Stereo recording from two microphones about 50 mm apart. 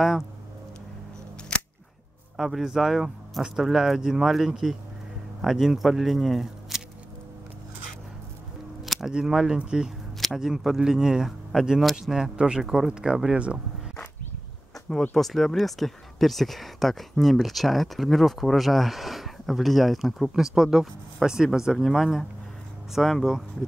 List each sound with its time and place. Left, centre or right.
1.5 s scissors: centre
2.3 s speech: centre
8.8 s a sound: centre
9.1 s speech: centre
14.9 s speech: centre